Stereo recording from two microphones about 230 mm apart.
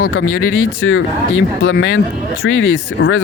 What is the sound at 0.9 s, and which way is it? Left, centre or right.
Speech, left.